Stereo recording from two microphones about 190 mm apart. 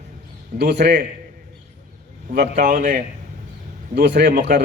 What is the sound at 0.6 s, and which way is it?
Speech, 60° right (ahead or behind).